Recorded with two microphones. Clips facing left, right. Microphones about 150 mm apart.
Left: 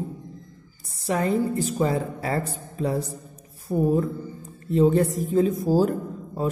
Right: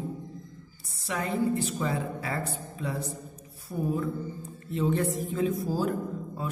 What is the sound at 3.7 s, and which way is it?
Speech, 55° left (ahead or behind).